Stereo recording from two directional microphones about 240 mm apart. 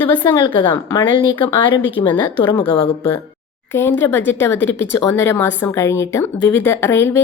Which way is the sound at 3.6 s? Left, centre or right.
Centre.